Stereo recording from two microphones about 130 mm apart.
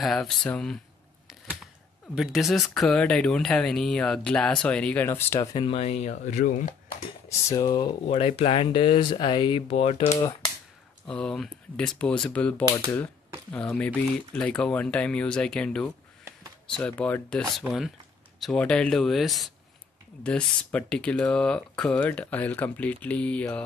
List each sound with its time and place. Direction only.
0.0 s speech: 5° left (ahead or behind)
2.1 s speech: centre (ahead or behind); by 5.7 s 25° left (ahead or behind)
5.7 s speech: 55° left (ahead or behind); by 6.7 s 70° left (ahead or behind)
7.4 s speech: 25° left (ahead or behind)
8.1 s speech: 50° left (ahead or behind)
11.1 s speech: 5° left (ahead or behind)